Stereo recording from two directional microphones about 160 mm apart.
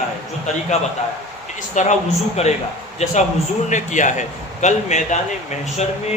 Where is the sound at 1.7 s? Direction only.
45° left (ahead or behind).